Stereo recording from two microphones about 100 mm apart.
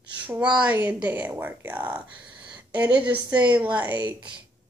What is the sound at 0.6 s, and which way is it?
Speech, 15° right (ahead or behind).